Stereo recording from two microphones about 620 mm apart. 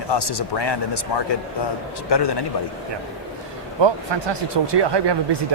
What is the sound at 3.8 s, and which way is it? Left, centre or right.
Speech, right.